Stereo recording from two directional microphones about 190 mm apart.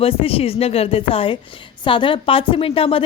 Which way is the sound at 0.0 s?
30° left (ahead or behind).